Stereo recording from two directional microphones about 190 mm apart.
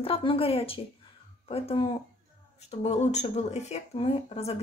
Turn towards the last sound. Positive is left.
turn(degrees=30)  # may be behind; listen again after turning